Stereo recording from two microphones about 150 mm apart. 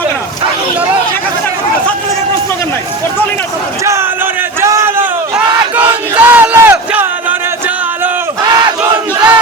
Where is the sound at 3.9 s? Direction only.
15° right (ahead or behind).